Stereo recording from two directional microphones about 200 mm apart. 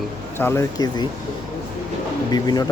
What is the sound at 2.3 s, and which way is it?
Speech, 20° left (ahead or behind).